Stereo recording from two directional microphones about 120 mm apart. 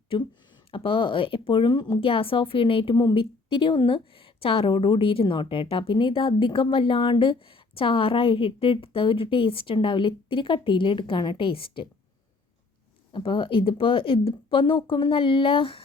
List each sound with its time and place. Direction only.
0.7 s speech: 45° left (ahead or behind)
13.1 s speech: 45° left (ahead or behind)